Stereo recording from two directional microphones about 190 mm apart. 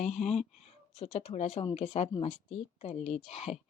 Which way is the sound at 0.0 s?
35° left (ahead or behind).